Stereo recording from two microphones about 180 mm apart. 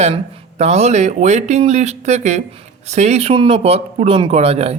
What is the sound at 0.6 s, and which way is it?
Speech, 35° right (ahead or behind).